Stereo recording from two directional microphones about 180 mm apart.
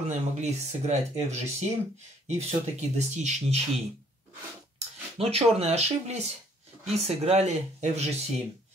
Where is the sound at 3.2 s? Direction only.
40° right (ahead or behind).